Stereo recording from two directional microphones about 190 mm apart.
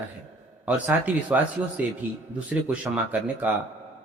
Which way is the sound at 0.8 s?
5° right (ahead or behind).